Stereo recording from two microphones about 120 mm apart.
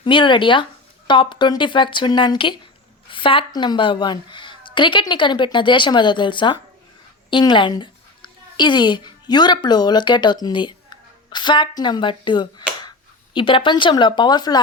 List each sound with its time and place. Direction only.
0.0 s speech: 45° left (ahead or behind)
3.1 s a sound: 45° left (ahead or behind)
3.5 s a woman's voice: 40° left (ahead or behind)